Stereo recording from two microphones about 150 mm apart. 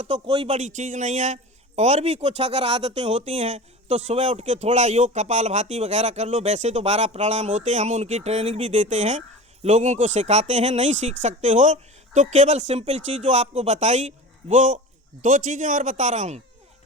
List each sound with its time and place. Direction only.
0.0 s a man's voice: 45° right (ahead or behind)